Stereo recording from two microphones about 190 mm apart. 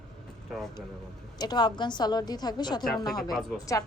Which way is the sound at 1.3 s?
20° left (ahead or behind).